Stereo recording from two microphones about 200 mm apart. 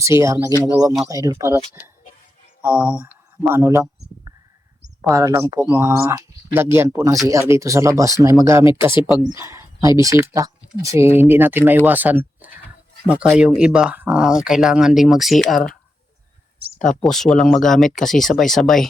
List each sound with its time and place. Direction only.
0.0 s speech: 15° right (ahead or behind)
5.1 s speech: 15° right (ahead or behind)
9.3 s a sound: 15° right (ahead or behind)
10.0 s speech: 15° right (ahead or behind)
16.7 s speech: 40° left (ahead or behind)
17.0 s speech: centre (ahead or behind)